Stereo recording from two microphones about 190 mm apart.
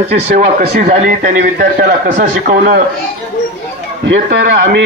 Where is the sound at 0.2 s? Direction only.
45° right (ahead or behind).